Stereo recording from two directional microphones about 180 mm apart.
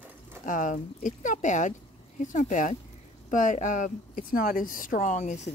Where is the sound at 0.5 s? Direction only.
45° left (ahead or behind).